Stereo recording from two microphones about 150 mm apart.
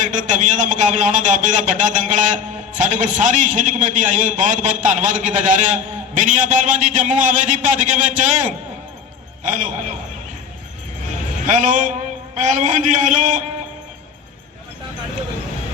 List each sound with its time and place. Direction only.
0.0 s a man's voice: 55° right (ahead or behind)
11.4 s a man's voice: 55° right (ahead or behind)